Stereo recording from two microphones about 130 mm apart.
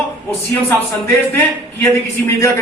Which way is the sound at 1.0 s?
15° left (ahead or behind).